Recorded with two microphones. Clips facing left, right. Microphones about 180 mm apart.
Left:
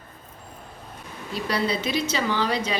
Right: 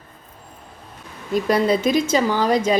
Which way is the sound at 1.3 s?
50° right (ahead or behind).